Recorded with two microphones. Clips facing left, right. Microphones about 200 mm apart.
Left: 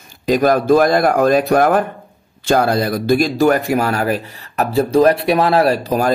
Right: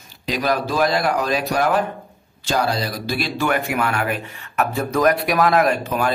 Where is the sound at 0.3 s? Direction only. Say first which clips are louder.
Left 9 dB; 50° left (ahead or behind).